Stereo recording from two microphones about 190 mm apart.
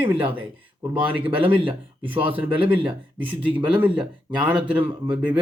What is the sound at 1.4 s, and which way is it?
Speech, 10° right (ahead or behind).